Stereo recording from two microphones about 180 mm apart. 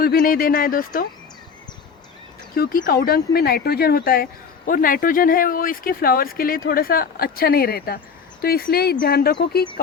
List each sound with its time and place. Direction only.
0.0 s speech: 55° left (ahead or behind)
2.6 s speech: 50° left (ahead or behind)